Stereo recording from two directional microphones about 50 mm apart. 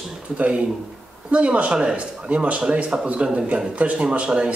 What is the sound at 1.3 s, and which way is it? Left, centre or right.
Speech, right.